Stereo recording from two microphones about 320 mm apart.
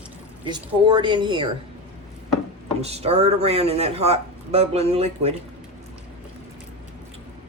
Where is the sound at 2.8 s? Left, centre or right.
Centre.